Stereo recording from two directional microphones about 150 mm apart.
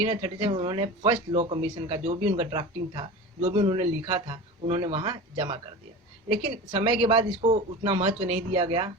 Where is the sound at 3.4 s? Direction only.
45° right (ahead or behind).